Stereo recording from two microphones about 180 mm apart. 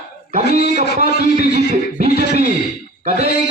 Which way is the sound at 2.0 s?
40° right (ahead or behind).